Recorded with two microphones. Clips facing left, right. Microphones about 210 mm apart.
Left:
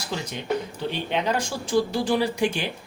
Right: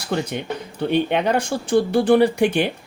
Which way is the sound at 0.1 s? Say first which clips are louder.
Right 3 dB; 60° right (ahead or behind).